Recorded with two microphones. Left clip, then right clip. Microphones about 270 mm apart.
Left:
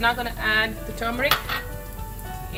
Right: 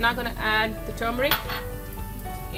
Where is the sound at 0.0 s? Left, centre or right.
Right.